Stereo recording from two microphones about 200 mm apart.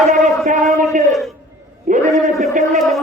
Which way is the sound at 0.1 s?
40° right (ahead or behind).